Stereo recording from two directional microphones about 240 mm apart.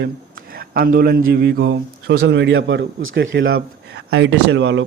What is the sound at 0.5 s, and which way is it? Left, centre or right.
A man's voice, right.